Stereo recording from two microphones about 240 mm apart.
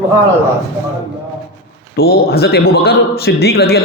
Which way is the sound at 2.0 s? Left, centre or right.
Left.